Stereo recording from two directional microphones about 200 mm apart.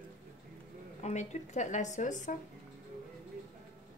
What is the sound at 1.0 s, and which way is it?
A woman's voice, 35° left (ahead or behind).